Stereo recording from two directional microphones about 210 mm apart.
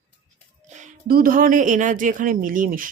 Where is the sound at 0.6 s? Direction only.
35° right (ahead or behind).